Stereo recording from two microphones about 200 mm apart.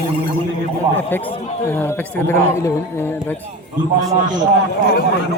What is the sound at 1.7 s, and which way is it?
Speech, 10° left (ahead or behind).